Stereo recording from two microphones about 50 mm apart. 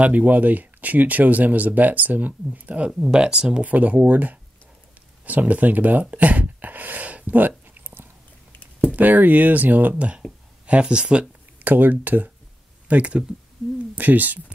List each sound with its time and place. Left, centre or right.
0.0 s speech: right
3.0 s speech: centre
3.6 s speech: right
5.2 s a sound: right
8.9 s speech: right
11.6 s speech: right